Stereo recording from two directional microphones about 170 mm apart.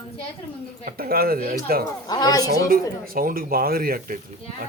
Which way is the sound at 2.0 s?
25° left (ahead or behind).